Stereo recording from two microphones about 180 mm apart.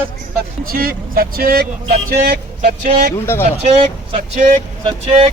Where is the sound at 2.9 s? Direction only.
60° right (ahead or behind).